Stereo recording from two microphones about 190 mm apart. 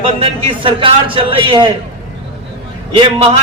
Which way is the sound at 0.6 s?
25° right (ahead or behind).